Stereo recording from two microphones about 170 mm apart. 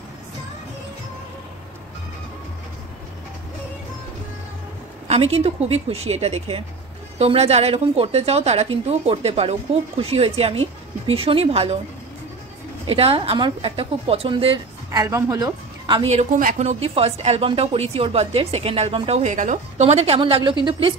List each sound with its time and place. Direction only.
5.0 s a woman's voice: 35° right (ahead or behind)
12.8 s a woman's voice: 35° right (ahead or behind)
14.9 s a woman's voice: 15° right (ahead or behind)
16.3 s a woman's voice: 50° right (ahead or behind); by 20.5 s 30° right (ahead or behind)